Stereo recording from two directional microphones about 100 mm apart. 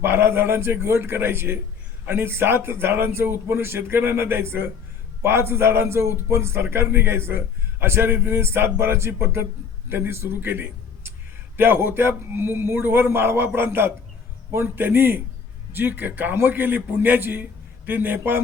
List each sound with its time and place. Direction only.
0.0 s a man's voice: 20° right (ahead or behind)